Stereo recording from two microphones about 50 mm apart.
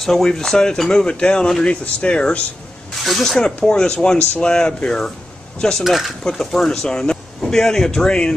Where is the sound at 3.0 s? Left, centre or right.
Centre.